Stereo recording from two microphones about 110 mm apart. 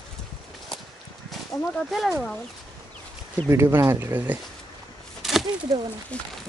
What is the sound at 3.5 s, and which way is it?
Speech, 25° right (ahead or behind).